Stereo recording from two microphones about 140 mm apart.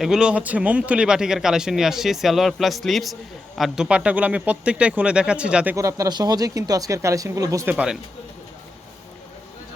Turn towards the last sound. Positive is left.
turn(degrees=-10)  # may be behind; listen again after turning